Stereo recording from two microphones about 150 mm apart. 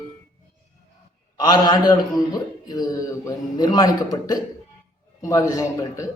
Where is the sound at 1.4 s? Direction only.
30° left (ahead or behind).